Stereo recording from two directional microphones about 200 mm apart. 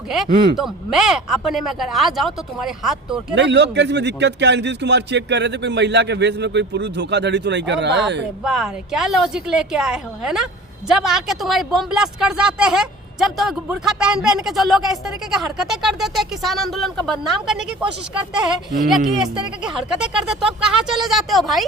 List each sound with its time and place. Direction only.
0.5 s a woman's voice: centre (ahead or behind)
3.3 s a man's voice: 60° right (ahead or behind)
8.4 s a woman's voice: centre (ahead or behind)
18.9 s a woman's voice: centre (ahead or behind)